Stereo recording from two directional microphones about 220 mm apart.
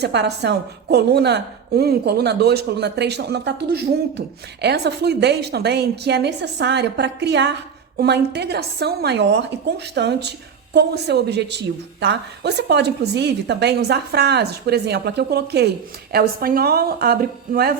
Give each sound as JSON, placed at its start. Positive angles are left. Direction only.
{"t": 0.0, "sound": "a woman's voice", "side_deg": -50}